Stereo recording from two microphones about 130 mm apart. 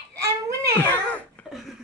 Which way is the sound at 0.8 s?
10° left (ahead or behind).